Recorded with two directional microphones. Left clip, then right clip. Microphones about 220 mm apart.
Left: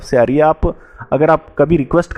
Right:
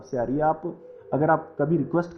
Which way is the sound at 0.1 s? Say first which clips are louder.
Left 13 dB; 50° left (ahead or behind).